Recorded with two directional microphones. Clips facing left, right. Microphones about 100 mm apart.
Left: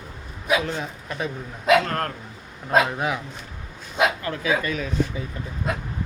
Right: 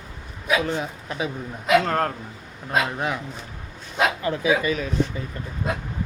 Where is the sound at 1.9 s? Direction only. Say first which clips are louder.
Right 4 dB; 20° right (ahead or behind).